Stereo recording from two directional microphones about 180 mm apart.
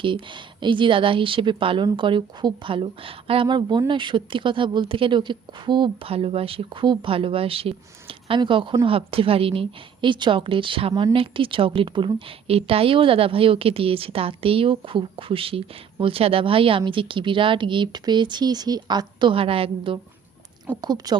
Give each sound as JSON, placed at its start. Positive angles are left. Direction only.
{"t": 0.0, "sound": "a woman's voice", "side_deg": -25}